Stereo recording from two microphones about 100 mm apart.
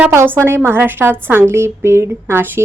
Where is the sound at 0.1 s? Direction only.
25° right (ahead or behind).